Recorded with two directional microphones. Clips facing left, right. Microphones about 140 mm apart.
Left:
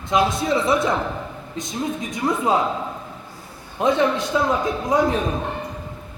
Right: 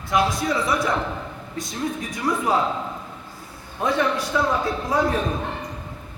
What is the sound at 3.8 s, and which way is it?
A man's voice, 20° left (ahead or behind).